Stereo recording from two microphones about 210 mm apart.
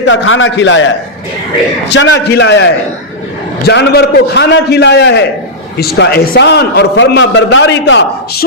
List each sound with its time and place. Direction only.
0.0 s a man's voice: 60° left (ahead or behind)
1.9 s a man's voice: 55° left (ahead or behind)